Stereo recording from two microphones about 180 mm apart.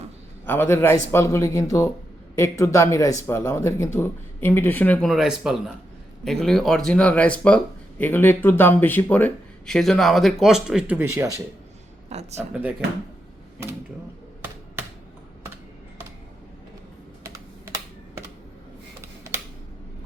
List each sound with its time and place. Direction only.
0.4 s speech: 10° left (ahead or behind); by 11.3 s 10° right (ahead or behind)
12.0 s speech: 35° right (ahead or behind)